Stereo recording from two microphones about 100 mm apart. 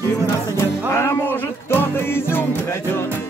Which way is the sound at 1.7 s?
25° left (ahead or behind).